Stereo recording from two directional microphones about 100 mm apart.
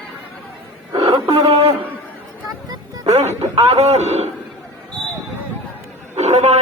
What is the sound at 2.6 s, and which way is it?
Music, 40° right (ahead or behind).